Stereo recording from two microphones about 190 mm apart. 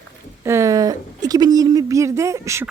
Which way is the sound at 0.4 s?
15° right (ahead or behind).